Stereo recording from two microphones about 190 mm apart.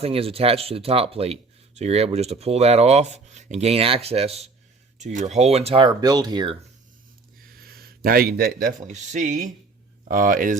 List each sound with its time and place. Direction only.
0.0 s speech: 30° right (ahead or behind)
7.5 s a sound: 50° right (ahead or behind)
8.9 s speech: 40° right (ahead or behind)